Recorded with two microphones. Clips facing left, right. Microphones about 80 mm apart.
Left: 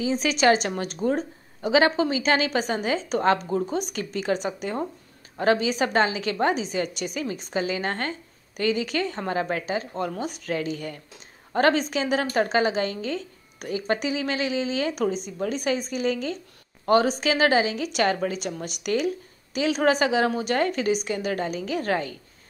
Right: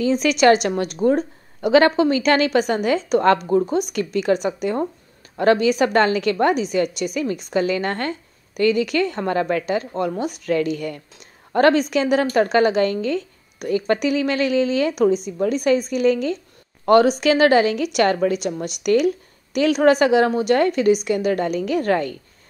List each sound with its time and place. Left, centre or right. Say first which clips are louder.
0.0 s a woman's voice: right 5 dB; right
1.0 s speech: right 7 dB; right
1.7 s a woman's voice: right 6 dB; right
3.9 s a woman's voice: right 7 dB; right
7.0 s a woman's voice: right 6 dB; right